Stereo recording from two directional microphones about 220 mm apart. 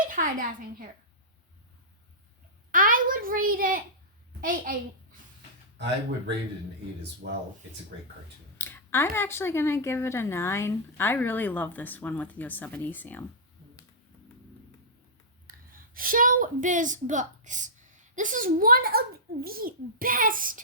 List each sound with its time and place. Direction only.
0.0 s a woman's voice: 40° right (ahead or behind)
2.7 s a child's voice: 40° right (ahead or behind)
5.7 s speech: 50° right (ahead or behind)
8.5 s speech: 10° left (ahead or behind)
15.4 s a woman's voice: 40° right (ahead or behind)